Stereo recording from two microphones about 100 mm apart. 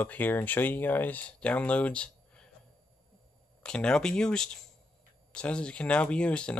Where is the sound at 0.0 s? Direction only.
20° left (ahead or behind).